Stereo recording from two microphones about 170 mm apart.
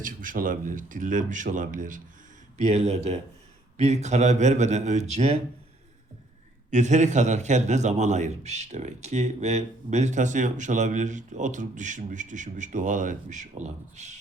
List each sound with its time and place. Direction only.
0.0 s a man's voice: 55° right (ahead or behind)
2.6 s a man's voice: 40° right (ahead or behind)
6.7 s a man's voice: 45° right (ahead or behind)